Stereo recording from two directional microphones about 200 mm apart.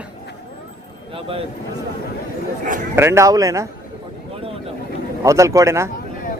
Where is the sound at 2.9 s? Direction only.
10° right (ahead or behind).